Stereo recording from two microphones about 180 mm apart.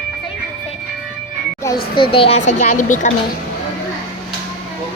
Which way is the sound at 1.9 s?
30° left (ahead or behind).